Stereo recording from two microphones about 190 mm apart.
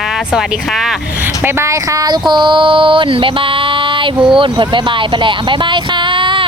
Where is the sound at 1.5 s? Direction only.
15° right (ahead or behind).